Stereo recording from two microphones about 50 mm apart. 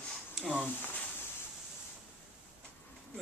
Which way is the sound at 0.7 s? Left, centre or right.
Left.